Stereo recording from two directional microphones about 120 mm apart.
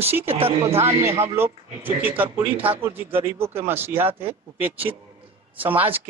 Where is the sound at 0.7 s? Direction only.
60° right (ahead or behind).